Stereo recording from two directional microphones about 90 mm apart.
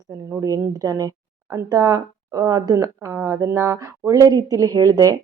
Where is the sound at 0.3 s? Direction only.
35° right (ahead or behind).